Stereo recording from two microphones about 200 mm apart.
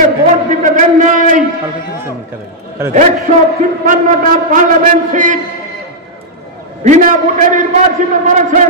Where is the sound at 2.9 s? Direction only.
35° right (ahead or behind).